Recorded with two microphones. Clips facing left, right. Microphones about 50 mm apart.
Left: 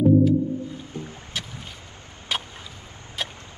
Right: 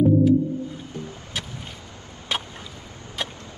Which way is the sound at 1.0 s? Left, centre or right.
Left.